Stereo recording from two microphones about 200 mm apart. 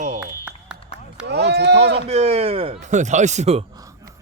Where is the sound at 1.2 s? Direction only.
55° right (ahead or behind).